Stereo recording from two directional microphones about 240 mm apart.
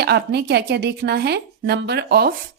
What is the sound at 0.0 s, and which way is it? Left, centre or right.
Speech, right.